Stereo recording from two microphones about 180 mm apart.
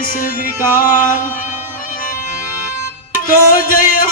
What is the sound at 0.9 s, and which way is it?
Music, 50° left (ahead or behind).